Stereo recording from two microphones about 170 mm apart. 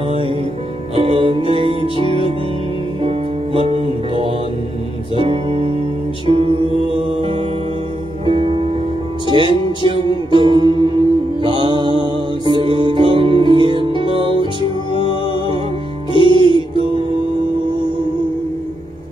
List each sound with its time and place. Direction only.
0.9 s music: 30° right (ahead or behind)
16.2 s music: 30° left (ahead or behind)